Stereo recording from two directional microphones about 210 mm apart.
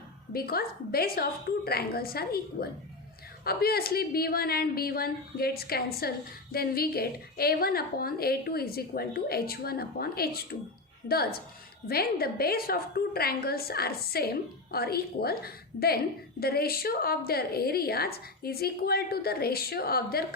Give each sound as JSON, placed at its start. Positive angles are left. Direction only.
{"t": 0.3, "sound": "a woman's voice", "side_deg": 45}